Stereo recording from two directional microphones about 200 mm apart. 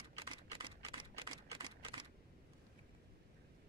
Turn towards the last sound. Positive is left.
turn(degrees=-20)  # may be behind; listen again after turning